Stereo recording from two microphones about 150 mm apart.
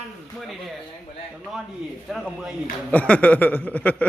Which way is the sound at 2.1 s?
5° right (ahead or behind).